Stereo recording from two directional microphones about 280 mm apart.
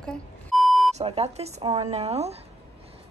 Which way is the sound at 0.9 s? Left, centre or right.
Right.